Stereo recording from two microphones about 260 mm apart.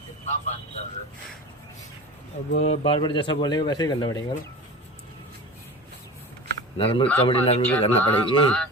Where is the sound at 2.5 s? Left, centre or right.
Left.